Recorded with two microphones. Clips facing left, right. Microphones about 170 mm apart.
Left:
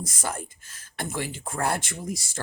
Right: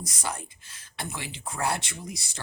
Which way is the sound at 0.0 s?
50° left (ahead or behind).